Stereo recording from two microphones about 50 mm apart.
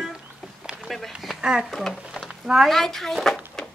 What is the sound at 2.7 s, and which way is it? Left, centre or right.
Speech, centre.